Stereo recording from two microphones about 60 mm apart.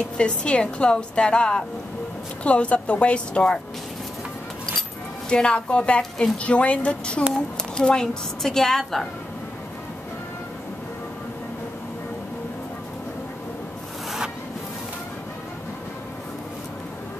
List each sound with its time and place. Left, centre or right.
0.2 s a woman's voice: centre
5.3 s a woman's voice: centre